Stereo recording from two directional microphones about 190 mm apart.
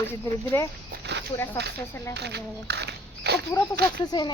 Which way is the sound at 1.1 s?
60° right (ahead or behind).